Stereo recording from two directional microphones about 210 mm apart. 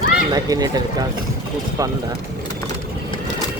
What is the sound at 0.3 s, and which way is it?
Speech, 20° right (ahead or behind).